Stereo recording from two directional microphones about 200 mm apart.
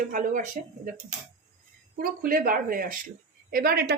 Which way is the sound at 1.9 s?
45° right (ahead or behind).